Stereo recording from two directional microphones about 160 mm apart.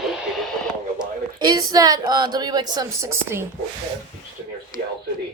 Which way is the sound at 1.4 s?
25° right (ahead or behind).